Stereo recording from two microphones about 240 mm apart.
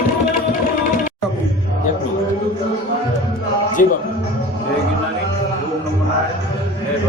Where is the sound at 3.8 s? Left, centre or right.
Left.